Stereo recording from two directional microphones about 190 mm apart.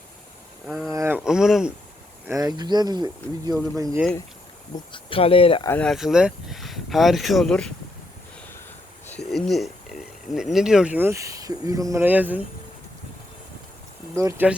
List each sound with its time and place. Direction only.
0.7 s speech: centre (ahead or behind)
0.9 s speech: 10° right (ahead or behind)
2.2 s speech: 15° right (ahead or behind)
4.9 s speech: 30° left (ahead or behind)
5.6 s speech: 5° left (ahead or behind)
9.0 s a sound: 5° left (ahead or behind)
10.3 s speech: centre (ahead or behind)
14.2 s speech: 15° right (ahead or behind)